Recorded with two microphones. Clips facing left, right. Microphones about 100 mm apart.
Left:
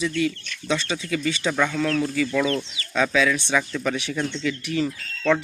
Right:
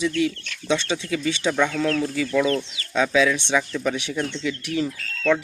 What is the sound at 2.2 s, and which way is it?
Speech, 10° right (ahead or behind).